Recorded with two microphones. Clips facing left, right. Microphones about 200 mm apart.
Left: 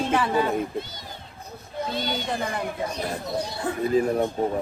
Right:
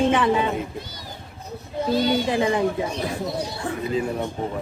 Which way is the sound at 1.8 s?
Centre (ahead or behind).